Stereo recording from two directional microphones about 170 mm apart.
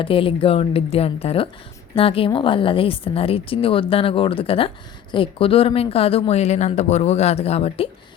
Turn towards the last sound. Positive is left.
turn(degrees=35)  # may be behind; listen again after turning